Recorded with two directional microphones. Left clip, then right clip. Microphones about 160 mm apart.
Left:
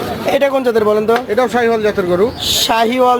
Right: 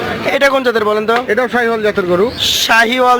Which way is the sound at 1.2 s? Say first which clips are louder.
Even; 35° right (ahead or behind).